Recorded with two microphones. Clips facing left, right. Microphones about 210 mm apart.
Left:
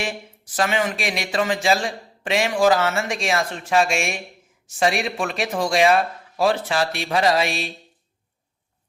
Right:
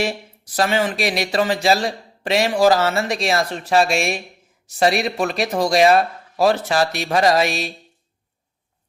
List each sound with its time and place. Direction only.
0.5 s a man's voice: 35° right (ahead or behind)